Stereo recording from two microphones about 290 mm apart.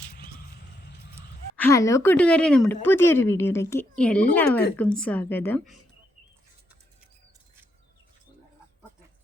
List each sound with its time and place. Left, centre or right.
0.8 s a sound: left
1.5 s speech: centre
4.4 s speech: left
4.8 s a woman's voice: centre